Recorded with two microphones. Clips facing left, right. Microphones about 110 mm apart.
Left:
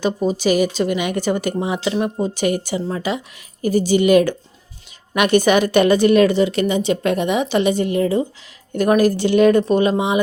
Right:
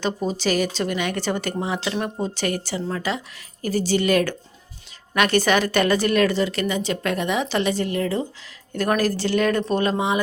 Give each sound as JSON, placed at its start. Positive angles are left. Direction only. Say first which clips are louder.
{"t": 0.0, "sound": "a woman's voice", "louder": "left 5 dB", "side_deg": 5}